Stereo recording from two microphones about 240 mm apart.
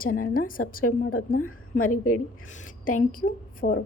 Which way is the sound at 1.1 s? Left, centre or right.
Left.